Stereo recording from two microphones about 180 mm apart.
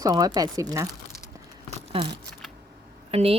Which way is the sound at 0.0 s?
20° right (ahead or behind).